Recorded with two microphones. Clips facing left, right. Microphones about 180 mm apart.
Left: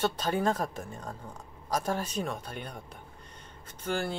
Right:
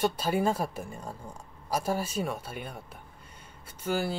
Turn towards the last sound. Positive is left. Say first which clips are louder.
# right 2 dB
turn(degrees=-5)  # may be behind; listen again after turning